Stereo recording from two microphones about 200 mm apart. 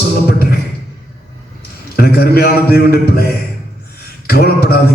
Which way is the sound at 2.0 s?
50° left (ahead or behind).